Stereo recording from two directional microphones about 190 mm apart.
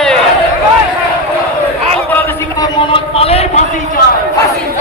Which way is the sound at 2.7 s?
30° left (ahead or behind).